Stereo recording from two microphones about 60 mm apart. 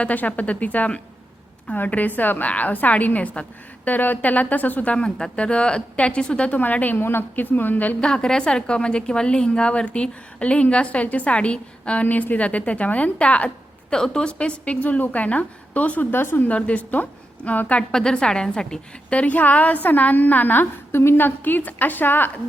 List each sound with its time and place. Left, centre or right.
0.0 s speech: left
8.0 s a woman's voice: centre
16.1 s a woman's voice: left
16.5 s speech: left
17.9 s a woman's voice: centre
19.1 s a woman's voice: left